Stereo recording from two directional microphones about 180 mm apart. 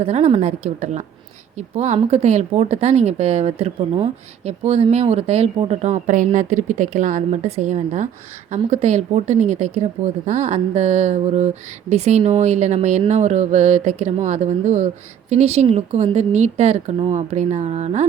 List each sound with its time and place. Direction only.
0.0 s a woman's voice: 35° right (ahead or behind)